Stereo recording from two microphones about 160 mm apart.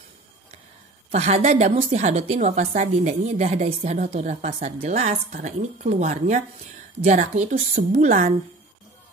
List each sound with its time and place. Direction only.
1.1 s a woman's voice: 45° right (ahead or behind)